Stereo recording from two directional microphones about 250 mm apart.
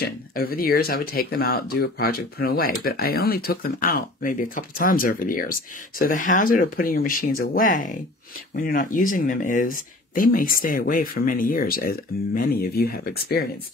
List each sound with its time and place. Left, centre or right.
0.0 s speech: left